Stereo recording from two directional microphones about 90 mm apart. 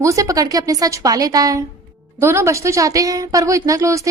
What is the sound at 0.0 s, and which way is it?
A woman's voice, 35° right (ahead or behind).